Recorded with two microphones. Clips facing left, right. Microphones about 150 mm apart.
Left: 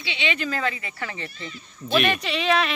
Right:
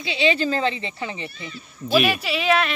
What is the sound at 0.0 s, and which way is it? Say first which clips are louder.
Speech: right 7 dB; 35° right (ahead or behind).